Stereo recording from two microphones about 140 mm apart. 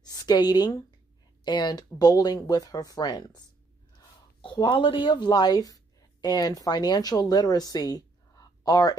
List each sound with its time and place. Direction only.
0.0 s speech: 30° left (ahead or behind)